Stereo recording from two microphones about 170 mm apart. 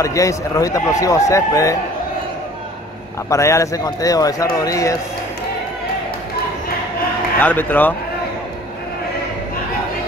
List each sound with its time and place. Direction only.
0.0 s speech: 20° left (ahead or behind)
3.3 s speech: 15° left (ahead or behind)
7.3 s speech: 10° left (ahead or behind)